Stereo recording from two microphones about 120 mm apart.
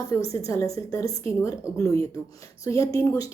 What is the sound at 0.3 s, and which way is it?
A woman's voice, 25° left (ahead or behind).